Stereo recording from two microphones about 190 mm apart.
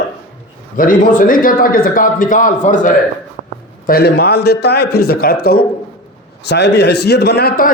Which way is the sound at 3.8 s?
55° left (ahead or behind).